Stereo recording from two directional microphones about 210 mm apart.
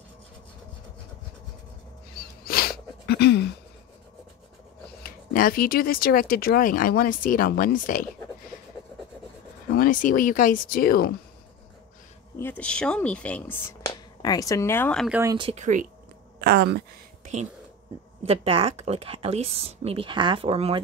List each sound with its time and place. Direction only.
2.1 s a sound: 45° left (ahead or behind)
5.0 s speech: 45° left (ahead or behind)
9.8 s speech: 40° left (ahead or behind)
12.4 s speech: 10° left (ahead or behind)
15.0 s speech: 10° right (ahead or behind)
15.3 s speech: 25° right (ahead or behind)
15.6 s speech: 35° right (ahead or behind)
16.3 s a sound: 50° right (ahead or behind)
18.2 s speech: 30° right (ahead or behind)